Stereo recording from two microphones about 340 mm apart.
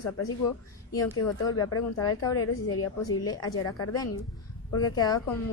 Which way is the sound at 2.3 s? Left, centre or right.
Left.